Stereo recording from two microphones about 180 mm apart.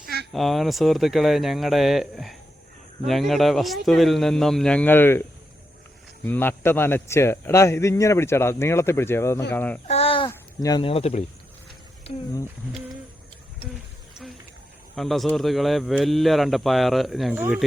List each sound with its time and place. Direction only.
0.0 s a sound: 60° right (ahead or behind)
0.3 s speech: centre (ahead or behind)
6.2 s a man's voice: 10° left (ahead or behind)
9.8 s goat: 35° left (ahead or behind)
14.9 s speech: centre (ahead or behind)